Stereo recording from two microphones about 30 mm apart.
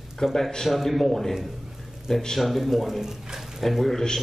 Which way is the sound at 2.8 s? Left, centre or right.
Centre.